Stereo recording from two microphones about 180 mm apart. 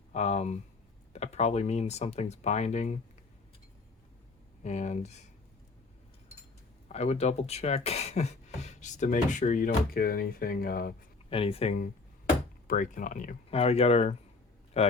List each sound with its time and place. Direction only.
0.1 s speech: 40° left (ahead or behind)
4.6 s speech: 40° left (ahead or behind)
6.8 s speech: 35° left (ahead or behind)
9.6 s speech: 55° left (ahead or behind)
11.3 s speech: 30° left (ahead or behind)
12.6 s speech: 45° left (ahead or behind)